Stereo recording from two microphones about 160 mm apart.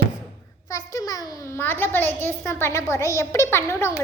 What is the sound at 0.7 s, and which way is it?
A child's voice, 20° left (ahead or behind).